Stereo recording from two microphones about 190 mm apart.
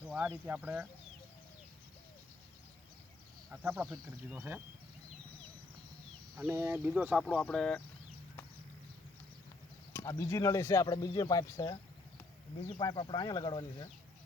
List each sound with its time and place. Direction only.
0.0 s speech: centre (ahead or behind)
3.5 s speech: 10° right (ahead or behind)
6.3 s speech: 10° right (ahead or behind)
7.3 s speech: 5° left (ahead or behind)
9.9 s speech: 15° left (ahead or behind)
12.8 s speech: 25° left (ahead or behind)